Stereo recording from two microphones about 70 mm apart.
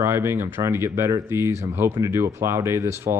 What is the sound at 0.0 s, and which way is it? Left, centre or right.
Speech, right.